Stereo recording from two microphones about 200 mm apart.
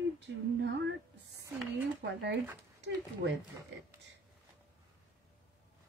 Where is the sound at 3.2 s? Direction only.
55° right (ahead or behind).